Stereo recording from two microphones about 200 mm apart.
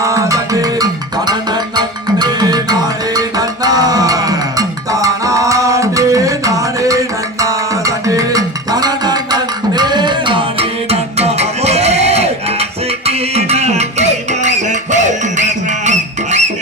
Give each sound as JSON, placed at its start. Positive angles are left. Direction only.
{"t": 0.0, "sound": "music", "side_deg": -15}